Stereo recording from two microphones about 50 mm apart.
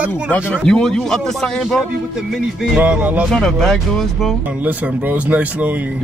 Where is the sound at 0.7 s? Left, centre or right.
Centre.